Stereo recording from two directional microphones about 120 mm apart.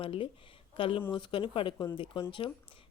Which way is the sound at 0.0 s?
50° left (ahead or behind).